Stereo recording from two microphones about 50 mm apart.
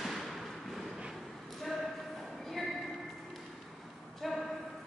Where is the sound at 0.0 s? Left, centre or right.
Centre.